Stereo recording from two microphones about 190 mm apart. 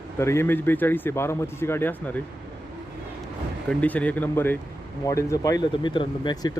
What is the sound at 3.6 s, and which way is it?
A man's voice, 10° left (ahead or behind).